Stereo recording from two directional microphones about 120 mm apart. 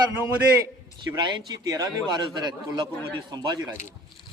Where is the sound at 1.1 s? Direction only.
30° right (ahead or behind).